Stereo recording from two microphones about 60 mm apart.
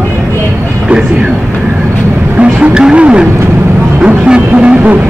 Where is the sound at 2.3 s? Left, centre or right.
Right.